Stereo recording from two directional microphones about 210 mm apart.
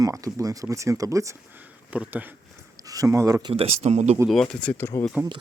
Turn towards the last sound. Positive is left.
turn(degrees=10)  # may be behind; listen again after turning